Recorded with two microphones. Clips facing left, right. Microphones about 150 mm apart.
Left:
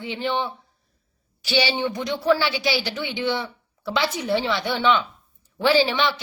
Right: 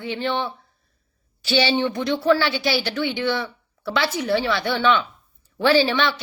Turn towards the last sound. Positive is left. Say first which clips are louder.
# right 1 dB
turn(degrees=15)  # may be behind; listen again after turning